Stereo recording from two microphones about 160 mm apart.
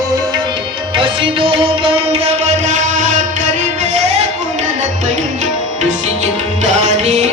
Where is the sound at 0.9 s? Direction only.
35° right (ahead or behind); by 3.2 s 50° right (ahead or behind).